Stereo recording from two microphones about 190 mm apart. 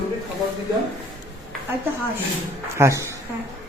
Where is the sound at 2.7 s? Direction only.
15° right (ahead or behind).